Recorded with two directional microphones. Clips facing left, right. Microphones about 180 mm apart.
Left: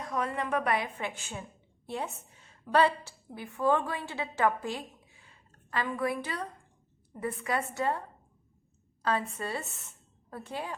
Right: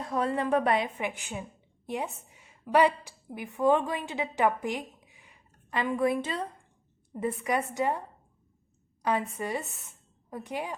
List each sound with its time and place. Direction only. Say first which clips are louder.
0.0 s a woman's voice: right 4 dB; 30° right (ahead or behind); by 10.8 s 15° right (ahead or behind)